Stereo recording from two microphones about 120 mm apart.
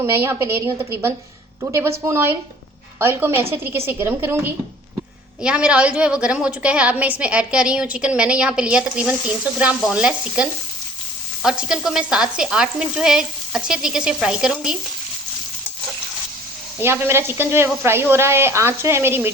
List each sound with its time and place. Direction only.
0.0 s a woman's voice: 20° right (ahead or behind)
11.4 s frying: 5° right (ahead or behind)
16.8 s a woman's voice: 20° right (ahead or behind)